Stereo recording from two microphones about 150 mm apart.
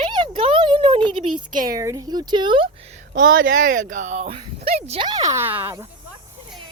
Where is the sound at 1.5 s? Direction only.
65° right (ahead or behind).